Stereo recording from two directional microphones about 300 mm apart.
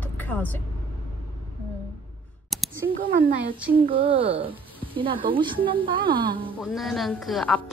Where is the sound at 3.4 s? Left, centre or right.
Centre.